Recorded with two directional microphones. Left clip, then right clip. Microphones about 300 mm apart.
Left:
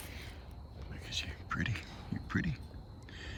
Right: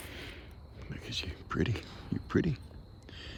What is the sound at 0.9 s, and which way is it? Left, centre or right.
Whispering, centre.